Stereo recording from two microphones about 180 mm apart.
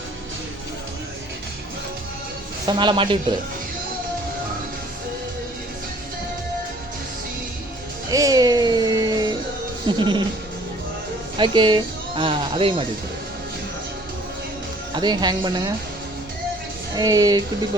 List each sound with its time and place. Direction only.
2.6 s speech: 25° right (ahead or behind)
8.1 s a sound: 20° right (ahead or behind)
9.8 s speech: 25° right (ahead or behind)
11.3 s speech: 25° right (ahead or behind)
14.9 s speech: 25° right (ahead or behind)
16.9 s speech: 20° right (ahead or behind)